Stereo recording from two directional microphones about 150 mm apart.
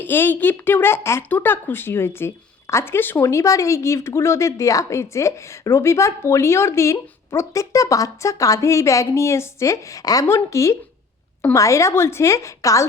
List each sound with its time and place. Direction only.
0.0 s speech: 15° left (ahead or behind)